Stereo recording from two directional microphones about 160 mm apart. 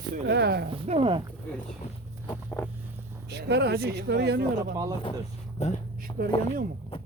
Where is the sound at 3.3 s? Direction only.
90° right.